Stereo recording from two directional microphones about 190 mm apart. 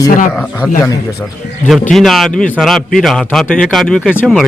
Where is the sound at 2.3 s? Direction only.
45° left (ahead or behind).